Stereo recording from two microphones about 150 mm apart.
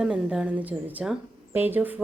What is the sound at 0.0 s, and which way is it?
A woman's voice, 5° right (ahead or behind).